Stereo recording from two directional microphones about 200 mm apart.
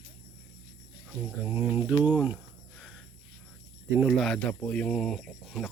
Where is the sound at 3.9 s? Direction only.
5° right (ahead or behind).